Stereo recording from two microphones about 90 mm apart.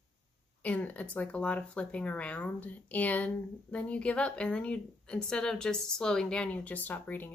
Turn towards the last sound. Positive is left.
turn(degrees=20)  # may be behind; listen again after turning